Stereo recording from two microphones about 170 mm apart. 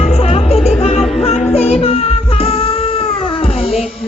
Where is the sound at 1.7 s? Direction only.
35° left (ahead or behind).